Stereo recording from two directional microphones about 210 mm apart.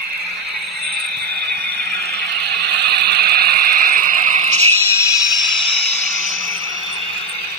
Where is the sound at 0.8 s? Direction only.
50° right (ahead or behind); by 4.6 s 35° right (ahead or behind).